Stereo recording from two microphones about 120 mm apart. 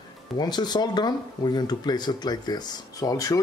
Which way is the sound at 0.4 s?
35° left (ahead or behind).